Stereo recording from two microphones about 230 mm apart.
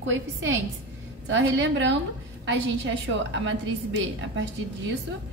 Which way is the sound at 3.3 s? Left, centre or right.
Right.